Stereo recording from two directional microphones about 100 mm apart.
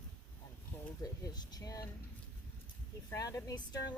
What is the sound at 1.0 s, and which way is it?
Speech, 35° left (ahead or behind).